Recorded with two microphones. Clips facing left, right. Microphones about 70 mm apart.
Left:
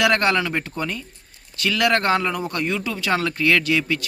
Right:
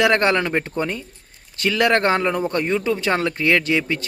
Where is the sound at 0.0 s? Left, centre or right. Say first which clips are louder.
Right 2 dB; right.